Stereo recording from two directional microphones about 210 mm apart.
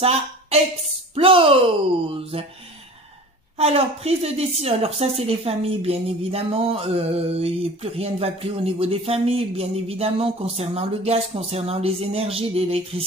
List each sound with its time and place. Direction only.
0.0 s a woman's voice: 30° right (ahead or behind)
3.5 s a woman's voice: 30° right (ahead or behind)